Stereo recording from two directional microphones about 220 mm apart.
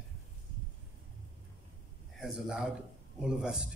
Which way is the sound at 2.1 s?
Centre (ahead or behind).